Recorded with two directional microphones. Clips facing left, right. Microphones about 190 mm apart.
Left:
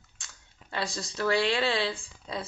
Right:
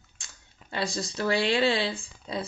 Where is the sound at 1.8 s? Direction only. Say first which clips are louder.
Right 1 dB; 5° right (ahead or behind).